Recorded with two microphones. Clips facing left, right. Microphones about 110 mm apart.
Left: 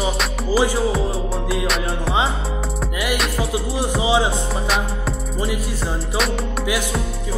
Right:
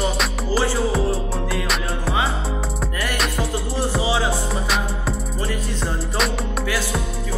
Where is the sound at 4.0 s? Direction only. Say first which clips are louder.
Left 4 dB; 20° left (ahead or behind).